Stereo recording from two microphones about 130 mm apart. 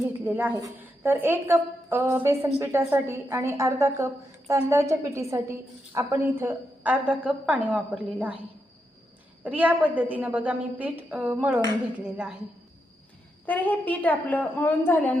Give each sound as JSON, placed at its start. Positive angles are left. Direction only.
{"t": 0.3, "sound": "a woman's voice", "side_deg": -15}
{"t": 9.4, "sound": "a woman's voice", "side_deg": -10}
{"t": 13.4, "sound": "a woman's voice", "side_deg": 15}